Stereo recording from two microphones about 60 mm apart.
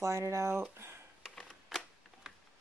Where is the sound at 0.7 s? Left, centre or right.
Right.